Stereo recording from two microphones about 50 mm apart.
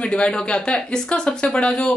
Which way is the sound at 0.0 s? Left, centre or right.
Centre.